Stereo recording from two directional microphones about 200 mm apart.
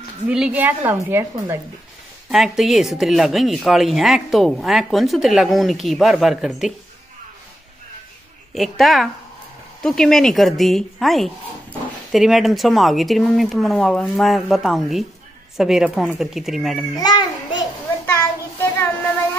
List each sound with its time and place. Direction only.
0.3 s a woman's voice: 5° right (ahead or behind)
8.5 s speech: centre (ahead or behind)
16.9 s a sound: 20° left (ahead or behind)
18.0 s child singing: 10° left (ahead or behind)